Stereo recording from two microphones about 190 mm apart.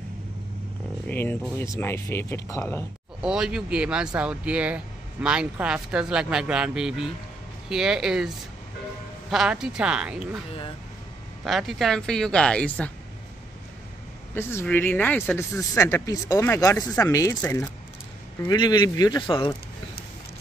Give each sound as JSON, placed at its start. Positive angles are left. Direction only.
{"t": 1.0, "sound": "speech", "side_deg": 10}
{"t": 3.2, "sound": "speech", "side_deg": -5}
{"t": 9.3, "sound": "speech", "side_deg": -5}
{"t": 11.4, "sound": "speech", "side_deg": 0}
{"t": 14.3, "sound": "speech", "side_deg": 10}